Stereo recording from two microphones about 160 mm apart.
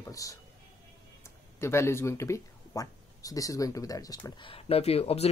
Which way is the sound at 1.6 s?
15° left (ahead or behind).